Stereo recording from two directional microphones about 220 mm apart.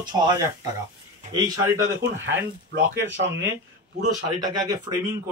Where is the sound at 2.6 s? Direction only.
55° right (ahead or behind).